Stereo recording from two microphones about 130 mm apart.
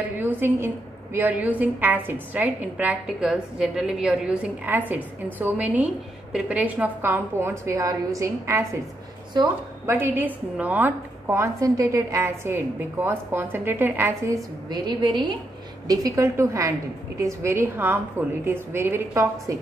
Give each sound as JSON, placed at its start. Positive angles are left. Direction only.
{"t": 0.2, "sound": "a woman's voice", "side_deg": -15}
{"t": 9.8, "sound": "a woman's voice", "side_deg": -15}